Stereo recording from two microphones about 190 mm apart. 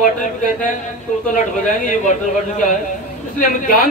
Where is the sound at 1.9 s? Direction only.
40° left (ahead or behind).